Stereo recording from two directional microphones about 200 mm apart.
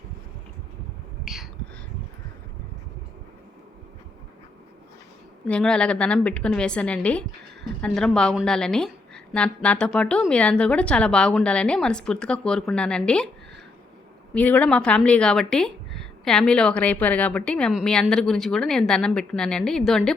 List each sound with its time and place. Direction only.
5.5 s a woman's voice: 5° left (ahead or behind)
14.3 s a woman's voice: 5° left (ahead or behind)